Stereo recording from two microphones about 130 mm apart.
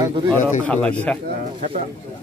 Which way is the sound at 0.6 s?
10° left (ahead or behind).